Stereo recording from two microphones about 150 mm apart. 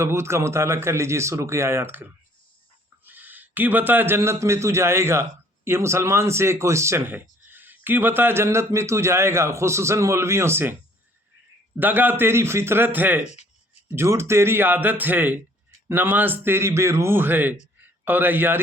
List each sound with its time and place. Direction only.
0.0 s a man's voice: 20° right (ahead or behind)
3.1 s a man's voice: 10° right (ahead or behind)
11.8 s a man's voice: 10° right (ahead or behind)